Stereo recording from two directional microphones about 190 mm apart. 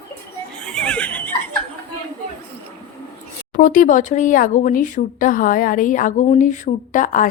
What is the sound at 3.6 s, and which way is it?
Speech, 45° left (ahead or behind).